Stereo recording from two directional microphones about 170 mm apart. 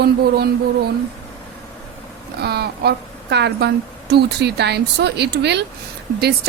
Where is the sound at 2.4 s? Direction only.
70° right (ahead or behind).